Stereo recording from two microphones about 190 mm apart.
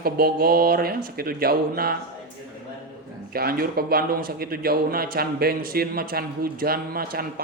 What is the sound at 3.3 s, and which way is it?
A woman's voice, 50° right (ahead or behind).